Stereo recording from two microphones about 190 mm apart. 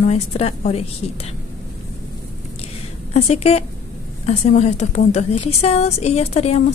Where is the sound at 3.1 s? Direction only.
35° left (ahead or behind).